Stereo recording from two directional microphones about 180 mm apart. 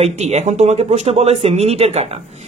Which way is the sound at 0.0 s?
35° right (ahead or behind).